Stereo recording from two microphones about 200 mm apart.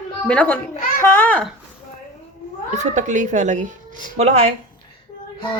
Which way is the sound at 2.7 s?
35° right (ahead or behind).